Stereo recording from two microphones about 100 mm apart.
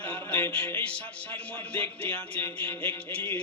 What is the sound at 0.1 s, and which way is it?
Music, 15° left (ahead or behind).